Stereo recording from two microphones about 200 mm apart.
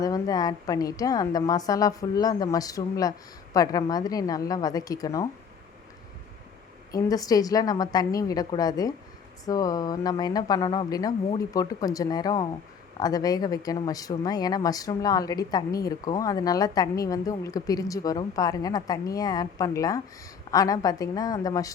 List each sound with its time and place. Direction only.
0.0 s speech: 20° left (ahead or behind)
6.9 s a woman's voice: 20° left (ahead or behind)